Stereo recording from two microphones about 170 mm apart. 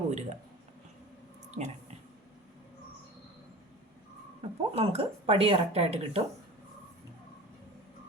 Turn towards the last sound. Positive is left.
turn(degrees=-35)  # may be behind; listen again after turning